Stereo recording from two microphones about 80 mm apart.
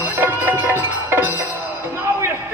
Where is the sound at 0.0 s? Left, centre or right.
Right.